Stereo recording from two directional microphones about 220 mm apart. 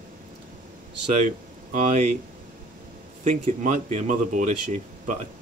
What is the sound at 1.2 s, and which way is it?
Speech, 35° right (ahead or behind).